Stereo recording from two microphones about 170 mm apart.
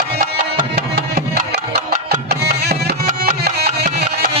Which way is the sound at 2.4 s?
70° right (ahead or behind).